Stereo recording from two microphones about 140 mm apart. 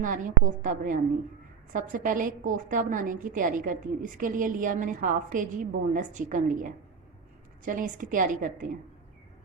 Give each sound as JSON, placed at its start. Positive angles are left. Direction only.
{"t": 0.0, "sound": "a woman's voice", "side_deg": -70}
{"t": 5.9, "sound": "a woman's voice", "side_deg": -60}